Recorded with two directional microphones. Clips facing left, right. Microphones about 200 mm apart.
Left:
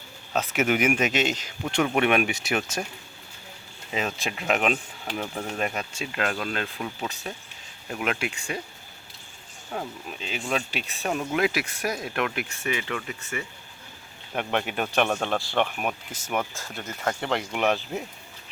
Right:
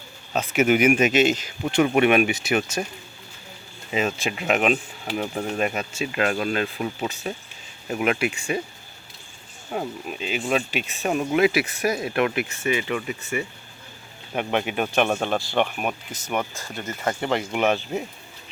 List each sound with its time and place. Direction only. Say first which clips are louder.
0.3 s speech: right 4 dB; centre (ahead or behind)
3.9 s speech: right 5 dB; 5° right (ahead or behind)
9.7 s speech: right 5 dB; 10° right (ahead or behind)